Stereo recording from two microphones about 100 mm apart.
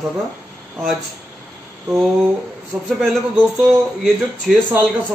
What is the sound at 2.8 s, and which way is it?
Speech, centre (ahead or behind).